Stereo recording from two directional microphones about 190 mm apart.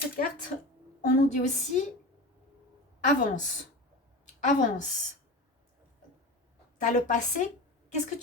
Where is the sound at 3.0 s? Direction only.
40° left (ahead or behind).